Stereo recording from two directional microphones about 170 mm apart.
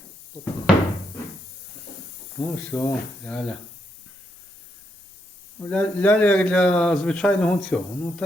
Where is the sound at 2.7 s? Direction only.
15° left (ahead or behind).